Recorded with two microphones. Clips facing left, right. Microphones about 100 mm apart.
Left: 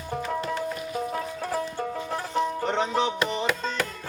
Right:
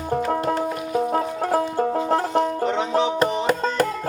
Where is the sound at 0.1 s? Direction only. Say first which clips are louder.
Right 7 dB; 50° right (ahead or behind).